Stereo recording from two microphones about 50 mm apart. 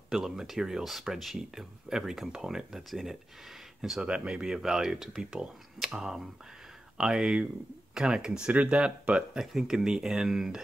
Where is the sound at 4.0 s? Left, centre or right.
Centre.